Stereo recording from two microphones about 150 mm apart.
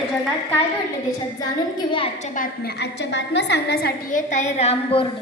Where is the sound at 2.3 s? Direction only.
90° left; by 5.1 s 40° left (ahead or behind).